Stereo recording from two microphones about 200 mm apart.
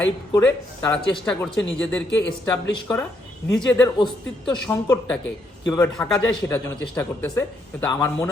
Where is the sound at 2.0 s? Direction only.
65° left (ahead or behind).